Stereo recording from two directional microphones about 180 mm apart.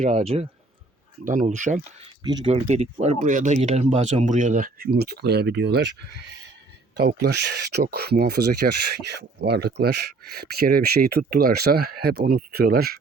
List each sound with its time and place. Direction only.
0.0 s speech: 40° right (ahead or behind)
1.2 s speech: 50° right (ahead or behind)
2.2 s speech: 30° right (ahead or behind); by 5.8 s 70° right (ahead or behind)
6.9 s speech: 60° right (ahead or behind)